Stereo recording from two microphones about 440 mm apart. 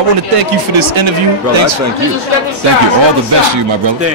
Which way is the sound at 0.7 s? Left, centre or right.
Right.